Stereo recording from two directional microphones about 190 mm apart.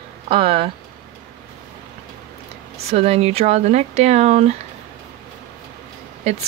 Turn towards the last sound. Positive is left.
turn(degrees=-35)  # may be behind; listen again after turning